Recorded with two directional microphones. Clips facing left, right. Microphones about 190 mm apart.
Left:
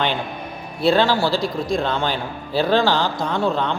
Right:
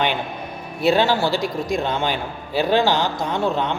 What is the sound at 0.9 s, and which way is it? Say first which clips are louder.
A man's voice: left 1 dB; 15° right (ahead or behind).